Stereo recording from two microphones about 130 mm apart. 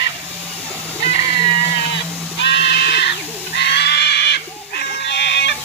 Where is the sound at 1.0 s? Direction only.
55° left (ahead or behind).